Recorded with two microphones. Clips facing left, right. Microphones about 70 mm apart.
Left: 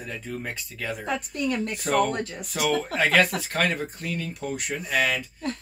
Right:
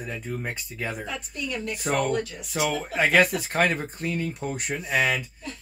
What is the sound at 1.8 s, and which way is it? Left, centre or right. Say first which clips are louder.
Speech: left 2 dB; centre.